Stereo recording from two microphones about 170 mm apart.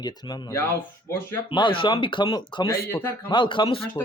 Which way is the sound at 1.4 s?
30° left (ahead or behind).